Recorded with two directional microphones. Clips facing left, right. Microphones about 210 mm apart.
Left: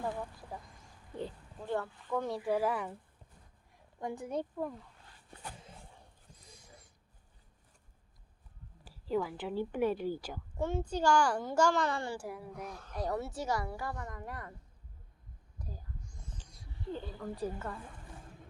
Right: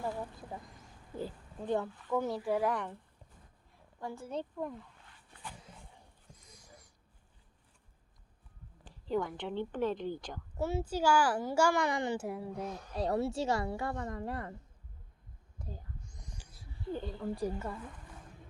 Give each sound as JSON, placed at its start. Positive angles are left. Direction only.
{"t": 0.0, "sound": "speech", "side_deg": -20}
{"t": 0.6, "sound": "a sound", "side_deg": -5}
{"t": 1.6, "sound": "a child's voice", "side_deg": -15}
{"t": 2.0, "sound": "speech", "side_deg": -5}
{"t": 4.0, "sound": "a woman's voice", "side_deg": 15}
{"t": 6.4, "sound": "a sound", "side_deg": 25}
{"t": 8.8, "sound": "a woman's voice", "side_deg": 5}
{"t": 10.6, "sound": "a child's voice", "side_deg": -5}
{"t": 15.5, "sound": "a sound", "side_deg": -25}
{"t": 17.2, "sound": "a child's voice", "side_deg": -15}